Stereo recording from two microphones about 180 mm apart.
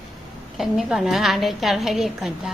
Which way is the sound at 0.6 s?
Centre (ahead or behind).